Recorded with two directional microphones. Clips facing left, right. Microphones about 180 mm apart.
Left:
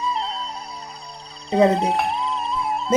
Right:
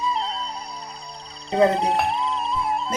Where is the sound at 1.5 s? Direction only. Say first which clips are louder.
Left 2 dB; centre (ahead or behind).